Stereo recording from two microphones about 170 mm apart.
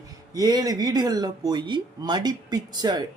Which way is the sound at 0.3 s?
20° right (ahead or behind).